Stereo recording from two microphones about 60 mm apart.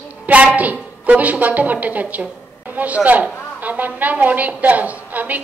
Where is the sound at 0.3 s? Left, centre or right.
Right.